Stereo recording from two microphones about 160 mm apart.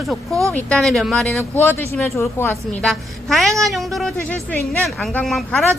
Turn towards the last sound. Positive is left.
turn(degrees=5)  # may be behind; listen again after turning